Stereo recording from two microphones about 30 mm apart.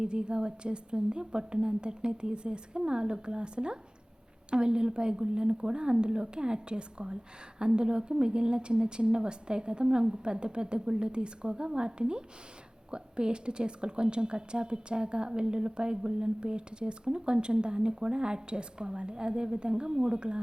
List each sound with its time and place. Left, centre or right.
0.0 s a woman's voice: right